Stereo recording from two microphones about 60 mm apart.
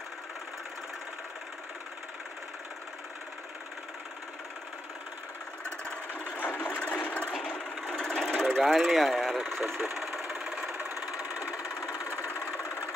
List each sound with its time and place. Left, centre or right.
5.7 s sewing machine: centre
6.3 s sewing machine: left
7.5 s a sound: centre
9.8 s engine: centre
11.9 s engine: left